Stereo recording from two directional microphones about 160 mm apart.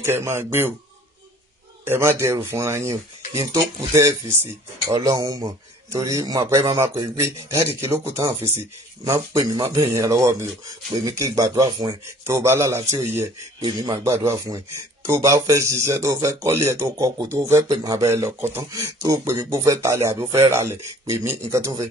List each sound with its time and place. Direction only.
0.0 s speech: 15° right (ahead or behind)
1.9 s speech: 15° right (ahead or behind)
8.3 s speech: 40° right (ahead or behind)
9.0 s speech: 20° right (ahead or behind)